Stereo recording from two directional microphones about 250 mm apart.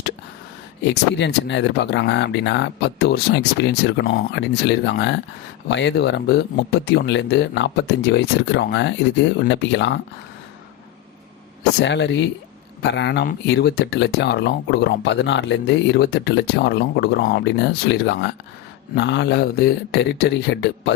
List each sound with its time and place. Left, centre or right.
0.9 s speech: left
11.8 s speech: left